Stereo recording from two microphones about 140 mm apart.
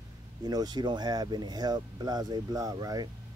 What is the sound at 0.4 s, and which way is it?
Speech, 30° right (ahead or behind).